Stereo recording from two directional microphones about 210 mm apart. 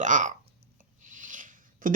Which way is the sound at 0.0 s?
35° right (ahead or behind).